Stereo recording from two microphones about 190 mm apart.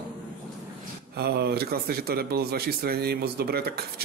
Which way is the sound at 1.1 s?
60° right (ahead or behind).